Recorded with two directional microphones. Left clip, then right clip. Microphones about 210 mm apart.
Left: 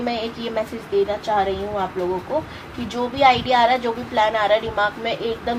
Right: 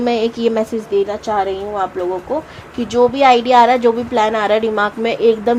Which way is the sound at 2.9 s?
50° right (ahead or behind).